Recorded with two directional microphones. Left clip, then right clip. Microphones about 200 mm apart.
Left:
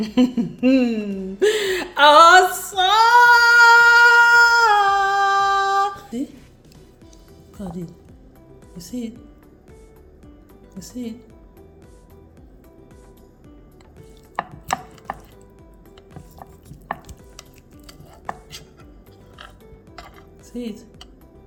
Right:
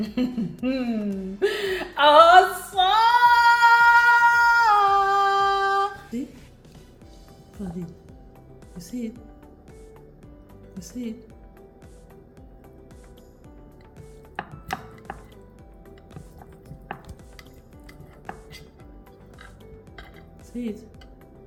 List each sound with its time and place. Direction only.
0.0 s speech: 60° left (ahead or behind)
1.4 s female singing: 60° left (ahead or behind)
8.8 s speech: 40° left (ahead or behind)
10.8 s a woman's voice: 5° left (ahead or behind)
20.6 s speech: 40° left (ahead or behind)